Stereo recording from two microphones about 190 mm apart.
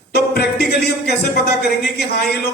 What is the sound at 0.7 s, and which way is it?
Speech, 60° left (ahead or behind).